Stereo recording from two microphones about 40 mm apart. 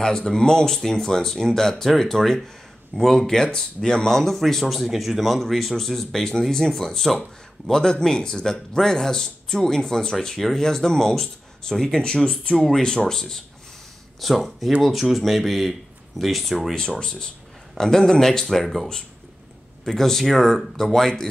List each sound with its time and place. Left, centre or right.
0.0 s speech: centre
4.2 s speech: centre
14.2 s speech: centre
16.7 s speech: centre